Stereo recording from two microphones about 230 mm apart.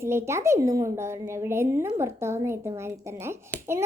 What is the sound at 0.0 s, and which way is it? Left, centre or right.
A woman's voice, centre.